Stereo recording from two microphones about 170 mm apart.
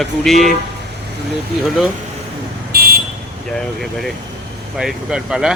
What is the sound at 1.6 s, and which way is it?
Speech, centre (ahead or behind).